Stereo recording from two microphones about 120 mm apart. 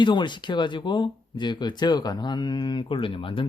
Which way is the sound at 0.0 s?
40° left (ahead or behind).